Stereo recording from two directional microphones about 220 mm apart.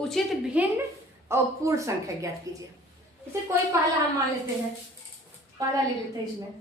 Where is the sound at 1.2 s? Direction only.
15° right (ahead or behind).